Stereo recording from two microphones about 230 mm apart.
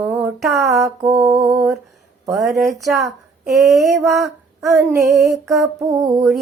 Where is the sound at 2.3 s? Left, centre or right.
Centre.